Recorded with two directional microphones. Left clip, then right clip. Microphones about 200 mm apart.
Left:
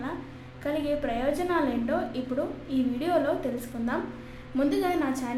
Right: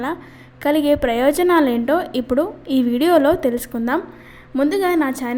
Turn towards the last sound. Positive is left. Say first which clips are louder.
# right 9 dB
turn(degrees=-35)  # may be behind; listen again after turning